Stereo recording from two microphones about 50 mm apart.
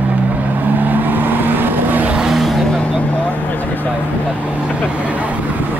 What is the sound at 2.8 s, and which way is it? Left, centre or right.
Vehicle, left.